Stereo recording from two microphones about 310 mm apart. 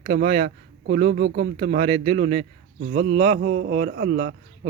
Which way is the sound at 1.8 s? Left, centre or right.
Centre.